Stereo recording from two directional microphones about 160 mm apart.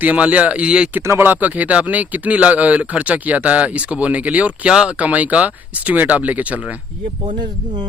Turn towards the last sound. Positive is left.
turn(degrees=-30)  # may be behind; listen again after turning